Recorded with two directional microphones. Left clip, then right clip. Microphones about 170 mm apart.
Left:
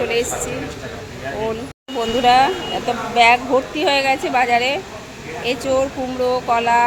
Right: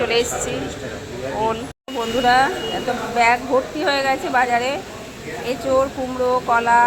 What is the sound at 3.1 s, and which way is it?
A woman's voice, 15° left (ahead or behind).